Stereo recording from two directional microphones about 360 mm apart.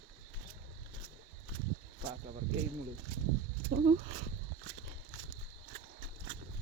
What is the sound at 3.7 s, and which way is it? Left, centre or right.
Speech, centre.